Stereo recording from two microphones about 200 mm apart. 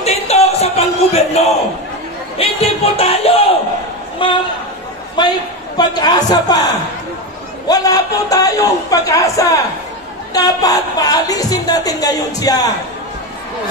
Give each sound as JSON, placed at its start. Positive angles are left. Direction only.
{"t": 0.0, "sound": "music", "side_deg": 30}
{"t": 4.2, "sound": "a sound", "side_deg": 25}
{"t": 5.8, "sound": "a man's voice", "side_deg": 20}